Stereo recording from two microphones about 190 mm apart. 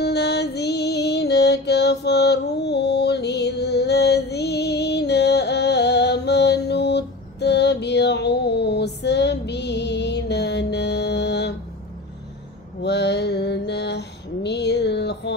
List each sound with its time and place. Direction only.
0.0 s music: 60° left (ahead or behind)
12.8 s mantra: 65° left (ahead or behind)